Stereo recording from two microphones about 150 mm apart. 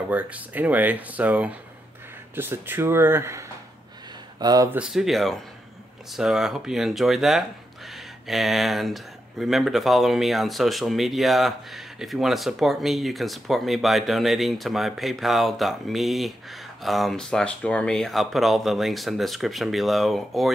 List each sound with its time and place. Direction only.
0.1 s speech: 10° right (ahead or behind); by 4.6 s 25° right (ahead or behind)
4.6 s speech: 5° right (ahead or behind)